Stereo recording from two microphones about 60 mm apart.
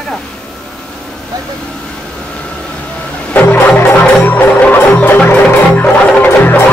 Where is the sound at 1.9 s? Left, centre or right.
Centre.